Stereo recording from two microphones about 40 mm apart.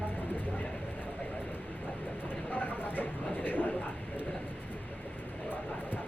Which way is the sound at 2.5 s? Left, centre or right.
Left.